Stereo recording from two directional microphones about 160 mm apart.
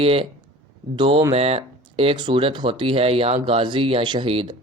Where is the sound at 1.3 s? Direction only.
40° right (ahead or behind).